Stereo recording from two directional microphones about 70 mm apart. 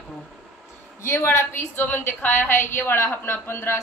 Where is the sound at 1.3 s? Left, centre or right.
Left.